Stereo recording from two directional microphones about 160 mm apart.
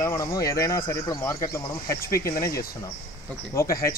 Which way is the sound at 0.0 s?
20° left (ahead or behind).